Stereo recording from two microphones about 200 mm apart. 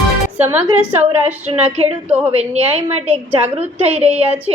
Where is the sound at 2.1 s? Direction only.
30° right (ahead or behind).